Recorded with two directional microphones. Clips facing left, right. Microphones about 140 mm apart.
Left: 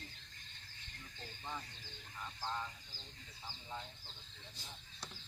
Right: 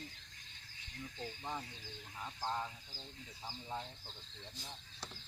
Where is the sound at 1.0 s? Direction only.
5° right (ahead or behind).